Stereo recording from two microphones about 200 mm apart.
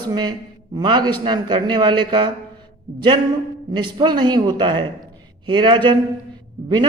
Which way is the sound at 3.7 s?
20° right (ahead or behind).